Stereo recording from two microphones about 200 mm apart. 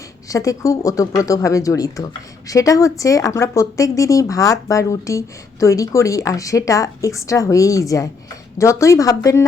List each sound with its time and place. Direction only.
0.3 s a woman's voice: 15° left (ahead or behind)